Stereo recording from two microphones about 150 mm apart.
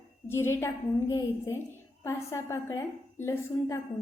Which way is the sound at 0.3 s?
15° left (ahead or behind).